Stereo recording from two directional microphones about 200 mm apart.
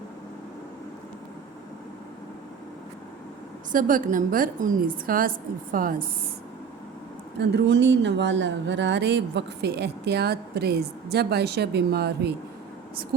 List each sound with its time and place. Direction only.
3.7 s a woman's voice: 45° right (ahead or behind)
7.3 s speech: 60° right (ahead or behind)